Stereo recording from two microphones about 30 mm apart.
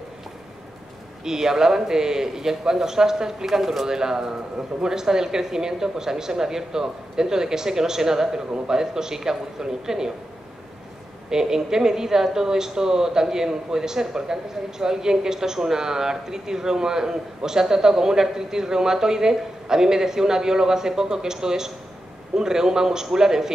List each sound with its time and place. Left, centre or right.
1.2 s speech: centre
11.2 s speech: right